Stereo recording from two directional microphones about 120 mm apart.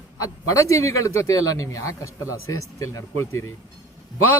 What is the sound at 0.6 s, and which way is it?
A man's voice, 25° left (ahead or behind).